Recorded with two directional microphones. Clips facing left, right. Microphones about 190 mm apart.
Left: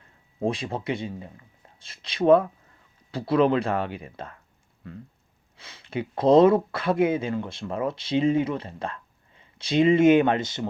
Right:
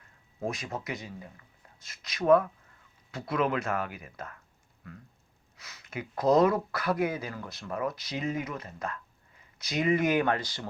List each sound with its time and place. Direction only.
0.4 s speech: 30° left (ahead or behind)